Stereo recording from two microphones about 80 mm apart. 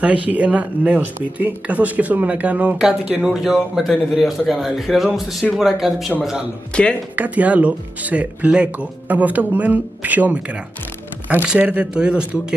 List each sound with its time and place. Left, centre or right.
0.0 s a man's voice: centre
6.7 s speech: centre
7.2 s speech: centre
11.4 s speech: centre